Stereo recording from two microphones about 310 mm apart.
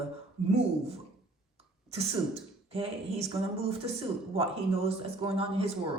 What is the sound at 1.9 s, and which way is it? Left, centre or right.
Speech, centre.